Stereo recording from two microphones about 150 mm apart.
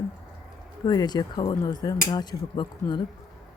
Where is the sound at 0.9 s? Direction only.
25° left (ahead or behind).